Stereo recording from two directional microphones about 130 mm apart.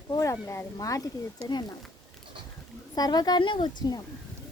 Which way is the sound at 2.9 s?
30° left (ahead or behind).